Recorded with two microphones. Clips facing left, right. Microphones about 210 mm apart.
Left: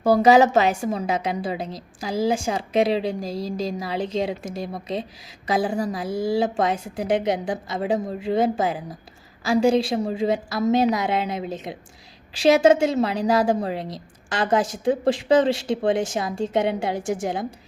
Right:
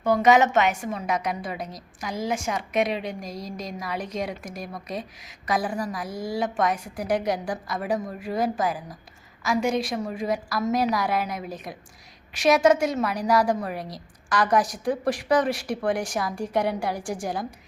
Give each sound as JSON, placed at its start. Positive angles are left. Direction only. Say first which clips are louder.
{"t": 0.0, "sound": "a woman's voice", "louder": "left 4 dB", "side_deg": 35}